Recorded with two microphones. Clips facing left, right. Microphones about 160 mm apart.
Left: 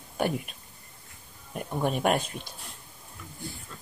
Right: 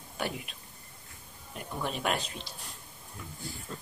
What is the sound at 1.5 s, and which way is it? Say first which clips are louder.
Speech: left 7 dB; 50° left (ahead or behind).